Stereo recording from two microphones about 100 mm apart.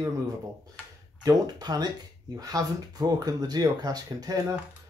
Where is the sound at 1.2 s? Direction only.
40° right (ahead or behind).